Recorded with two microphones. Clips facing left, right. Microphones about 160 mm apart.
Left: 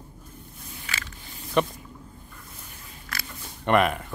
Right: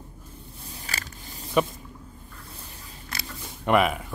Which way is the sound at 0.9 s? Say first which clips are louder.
Even; 35° right (ahead or behind).